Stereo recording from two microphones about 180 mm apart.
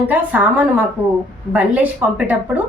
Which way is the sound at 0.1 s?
10° right (ahead or behind).